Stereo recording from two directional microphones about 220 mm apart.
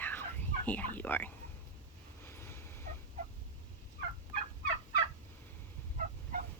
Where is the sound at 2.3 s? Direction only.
10° left (ahead or behind).